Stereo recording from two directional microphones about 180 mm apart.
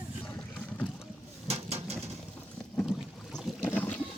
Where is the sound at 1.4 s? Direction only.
35° right (ahead or behind).